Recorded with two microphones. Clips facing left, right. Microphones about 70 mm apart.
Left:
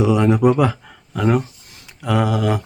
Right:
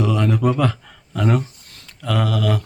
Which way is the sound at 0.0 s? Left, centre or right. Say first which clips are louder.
Left 4 dB; centre.